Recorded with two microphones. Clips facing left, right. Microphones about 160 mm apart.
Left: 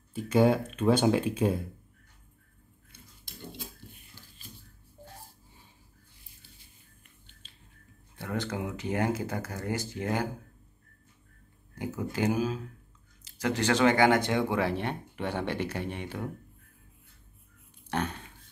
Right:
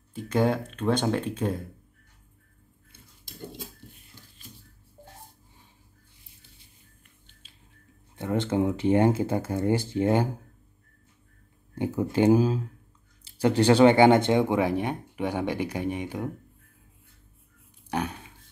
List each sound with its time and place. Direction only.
0.1 s speech: 5° left (ahead or behind)
7.4 s music: 5° right (ahead or behind)
8.2 s speech: 25° right (ahead or behind)
11.7 s speech: 30° right (ahead or behind); by 16.3 s 15° right (ahead or behind)
17.8 s speech: 10° right (ahead or behind)